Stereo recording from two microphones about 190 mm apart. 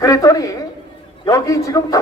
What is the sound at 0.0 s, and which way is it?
A woman's voice, 15° left (ahead or behind).